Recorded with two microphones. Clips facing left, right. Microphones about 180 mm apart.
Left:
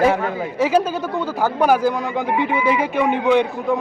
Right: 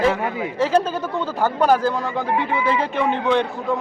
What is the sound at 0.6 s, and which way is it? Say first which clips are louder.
Speech: left 1 dB; 10° left (ahead or behind).